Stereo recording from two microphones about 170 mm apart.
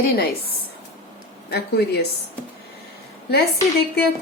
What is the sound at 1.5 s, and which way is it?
Speech, 75° left (ahead or behind).